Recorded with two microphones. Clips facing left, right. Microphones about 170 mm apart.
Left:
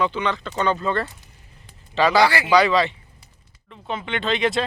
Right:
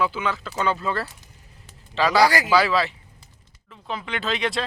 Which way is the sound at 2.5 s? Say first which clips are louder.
Left 3 dB; centre (ahead or behind).